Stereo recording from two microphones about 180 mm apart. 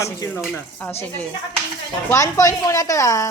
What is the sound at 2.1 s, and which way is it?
Speech, 15° left (ahead or behind).